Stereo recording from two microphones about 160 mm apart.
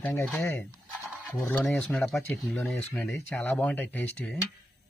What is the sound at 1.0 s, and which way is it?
Speech, 20° left (ahead or behind).